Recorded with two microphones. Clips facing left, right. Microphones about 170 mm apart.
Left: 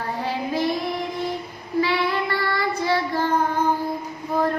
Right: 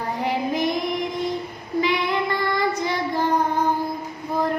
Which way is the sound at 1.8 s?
20° right (ahead or behind).